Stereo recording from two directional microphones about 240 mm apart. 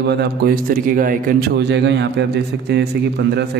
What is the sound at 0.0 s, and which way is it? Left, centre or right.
A man's voice, right.